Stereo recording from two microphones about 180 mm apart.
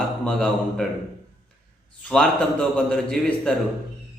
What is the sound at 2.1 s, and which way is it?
A man's voice, 5° left (ahead or behind).